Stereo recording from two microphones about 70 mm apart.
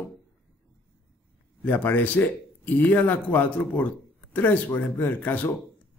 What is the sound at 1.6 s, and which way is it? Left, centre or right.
A man's voice, left.